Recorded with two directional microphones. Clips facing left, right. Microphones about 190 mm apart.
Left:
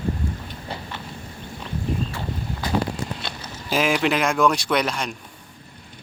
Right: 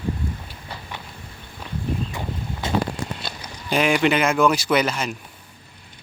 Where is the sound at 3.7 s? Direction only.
Centre (ahead or behind).